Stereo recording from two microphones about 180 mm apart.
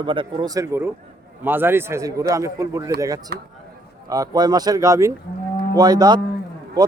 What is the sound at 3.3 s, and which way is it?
Speech, 65° right (ahead or behind).